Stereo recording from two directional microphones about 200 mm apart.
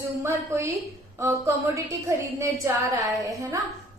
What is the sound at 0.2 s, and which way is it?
A woman's voice, 15° right (ahead or behind).